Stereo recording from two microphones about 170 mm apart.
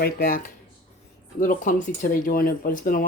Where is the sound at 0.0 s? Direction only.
60° left (ahead or behind).